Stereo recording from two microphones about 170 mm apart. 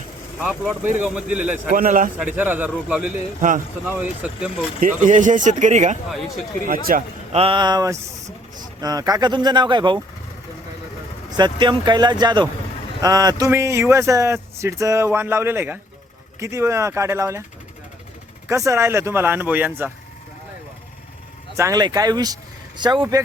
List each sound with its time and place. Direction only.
0.3 s speech: 10° right (ahead or behind)
1.7 s speech: 55° right (ahead or behind)
2.1 s speech: 10° right (ahead or behind)
4.8 s speech: 50° right (ahead or behind)
6.7 s speech: 55° right (ahead or behind)
7.3 s speech: 30° right (ahead or behind)
11.3 s speech: 25° right (ahead or behind)
18.4 s speech: 15° right (ahead or behind)
21.5 s speech: 20° right (ahead or behind)